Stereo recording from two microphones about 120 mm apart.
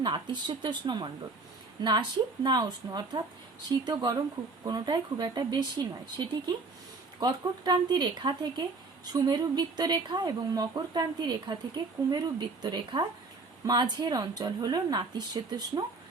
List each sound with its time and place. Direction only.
0.0 s speech: 40° right (ahead or behind)